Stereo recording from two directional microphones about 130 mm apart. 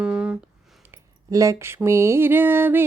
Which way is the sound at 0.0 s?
10° right (ahead or behind).